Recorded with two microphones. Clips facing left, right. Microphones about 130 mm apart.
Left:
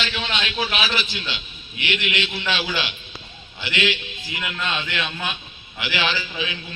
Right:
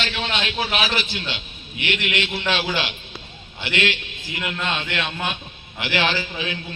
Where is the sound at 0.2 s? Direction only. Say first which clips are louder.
Right 1 dB; 50° right (ahead or behind).